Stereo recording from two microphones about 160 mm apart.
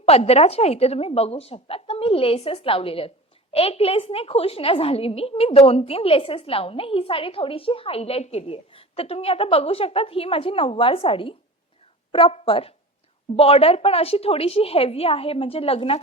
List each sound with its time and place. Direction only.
0.0 s a woman's voice: 40° left (ahead or behind)